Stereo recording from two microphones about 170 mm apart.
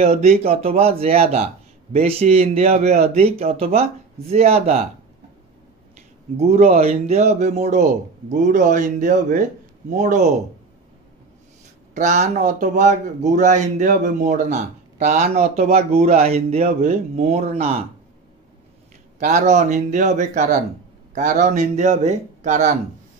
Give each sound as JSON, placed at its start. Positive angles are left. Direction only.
{"t": 0.0, "sound": "speech", "side_deg": -40}
{"t": 6.3, "sound": "speech", "side_deg": -40}
{"t": 11.9, "sound": "speech", "side_deg": -45}
{"t": 19.1, "sound": "speech", "side_deg": -45}